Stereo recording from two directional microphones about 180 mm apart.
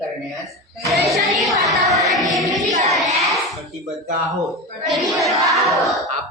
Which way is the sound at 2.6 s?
40° right (ahead or behind).